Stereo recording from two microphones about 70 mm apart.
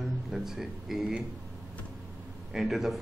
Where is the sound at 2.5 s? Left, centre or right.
Centre.